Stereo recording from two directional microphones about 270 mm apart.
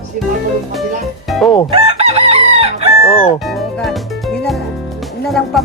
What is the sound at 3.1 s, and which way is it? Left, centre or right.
Speech, left.